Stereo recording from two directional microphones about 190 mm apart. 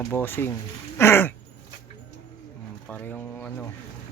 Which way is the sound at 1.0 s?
10° left (ahead or behind).